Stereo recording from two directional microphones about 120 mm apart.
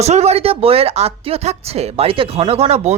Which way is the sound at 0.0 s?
65° right (ahead or behind).